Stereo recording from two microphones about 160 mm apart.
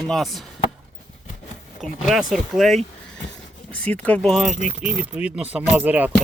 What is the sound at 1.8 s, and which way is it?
Speech, centre (ahead or behind).